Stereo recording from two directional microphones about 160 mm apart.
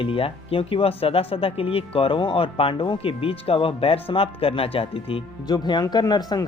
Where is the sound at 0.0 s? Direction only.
35° left (ahead or behind).